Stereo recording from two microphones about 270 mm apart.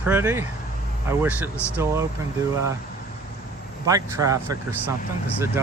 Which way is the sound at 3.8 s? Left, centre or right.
Centre.